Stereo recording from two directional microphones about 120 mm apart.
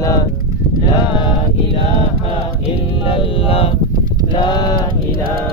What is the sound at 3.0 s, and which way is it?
Speech, 50° left (ahead or behind).